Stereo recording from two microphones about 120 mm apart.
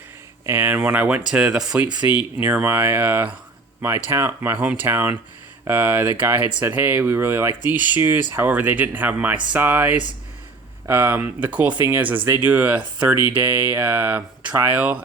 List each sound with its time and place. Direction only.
0.4 s speech: 20° right (ahead or behind)